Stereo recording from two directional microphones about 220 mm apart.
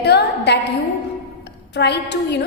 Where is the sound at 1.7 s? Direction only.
50° left (ahead or behind).